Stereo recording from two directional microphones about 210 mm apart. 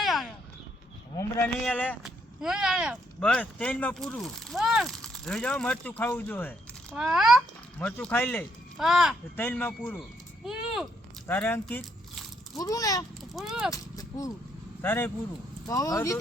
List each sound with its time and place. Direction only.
0.0 s a sound: centre (ahead or behind)
1.1 s speech: 10° left (ahead or behind)
2.0 s speech: 5° right (ahead or behind)
6.9 s speech: centre (ahead or behind)
8.8 s speech: centre (ahead or behind)
9.3 s speech: 10° left (ahead or behind)
10.4 s a sound: centre (ahead or behind)
11.3 s speech: 10° left (ahead or behind)
13.3 s speech: centre (ahead or behind)
13.7 s speech: 15° left (ahead or behind)